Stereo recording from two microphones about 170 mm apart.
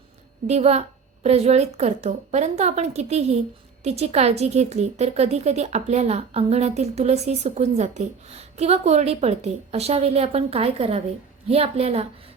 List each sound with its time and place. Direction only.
0.4 s a woman's voice: 40° right (ahead or behind)